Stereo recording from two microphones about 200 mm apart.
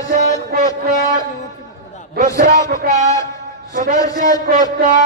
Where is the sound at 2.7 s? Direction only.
40° right (ahead or behind).